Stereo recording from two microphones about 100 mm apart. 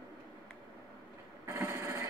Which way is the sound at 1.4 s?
25° right (ahead or behind).